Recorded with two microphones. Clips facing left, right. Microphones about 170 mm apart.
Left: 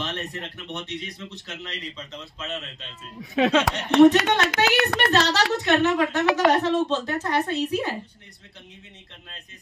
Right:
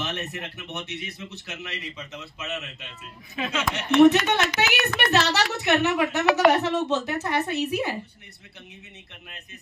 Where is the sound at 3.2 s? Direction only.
85° left; by 3.9 s 70° left (ahead or behind).